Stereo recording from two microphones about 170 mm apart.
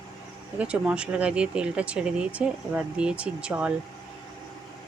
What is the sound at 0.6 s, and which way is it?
Speech, 5° right (ahead or behind).